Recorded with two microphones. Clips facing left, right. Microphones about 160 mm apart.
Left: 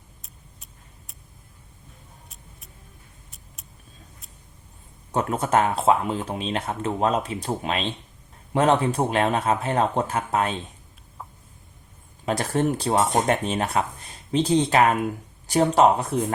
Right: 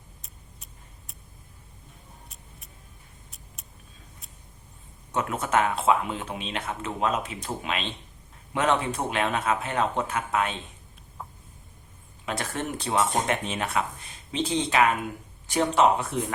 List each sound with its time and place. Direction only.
0.2 s vehicle: centre (ahead or behind)
3.2 s vehicle: centre (ahead or behind)
5.1 s speech: 35° left (ahead or behind)
12.2 s speech: 35° left (ahead or behind)